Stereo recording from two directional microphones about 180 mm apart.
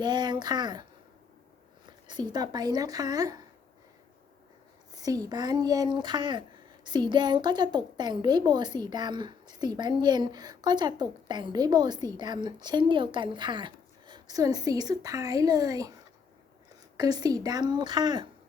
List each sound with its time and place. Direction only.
0.0 s a woman's voice: 25° right (ahead or behind)
2.0 s a woman's voice: 25° right (ahead or behind)
4.9 s a woman's voice: 20° right (ahead or behind)
17.0 s a woman's voice: 20° right (ahead or behind)